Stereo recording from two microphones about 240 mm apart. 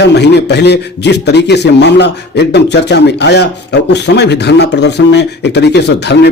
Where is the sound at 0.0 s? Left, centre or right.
Left.